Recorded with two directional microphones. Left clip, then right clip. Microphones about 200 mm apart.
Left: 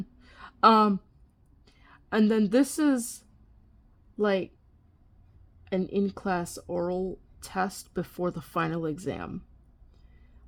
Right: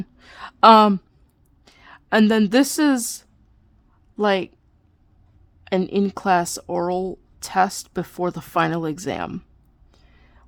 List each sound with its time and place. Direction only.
0.0 s a sound: 25° right (ahead or behind)
1.6 s a woman's voice: 20° right (ahead or behind)
4.2 s a woman's voice: 20° right (ahead or behind)
5.6 s a woman's voice: 25° right (ahead or behind)